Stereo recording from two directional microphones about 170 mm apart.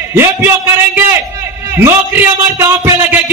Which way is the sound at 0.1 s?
15° right (ahead or behind).